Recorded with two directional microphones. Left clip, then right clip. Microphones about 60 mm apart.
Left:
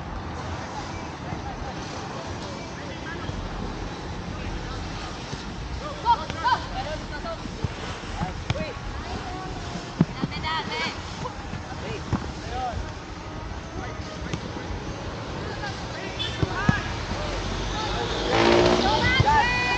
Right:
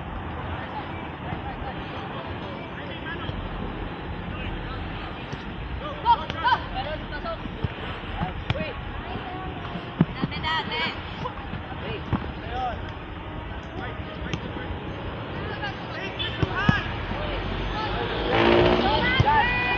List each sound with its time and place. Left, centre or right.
6.0 s a sound: centre
10.0 s boat: left
10.4 s boat: right
16.2 s basketball bounce: left
17.1 s vehicle: left